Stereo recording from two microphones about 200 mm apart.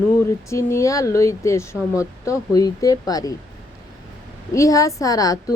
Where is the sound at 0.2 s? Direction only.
15° left (ahead or behind).